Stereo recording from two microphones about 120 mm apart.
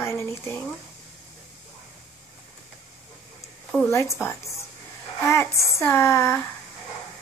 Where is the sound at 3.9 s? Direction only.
25° left (ahead or behind).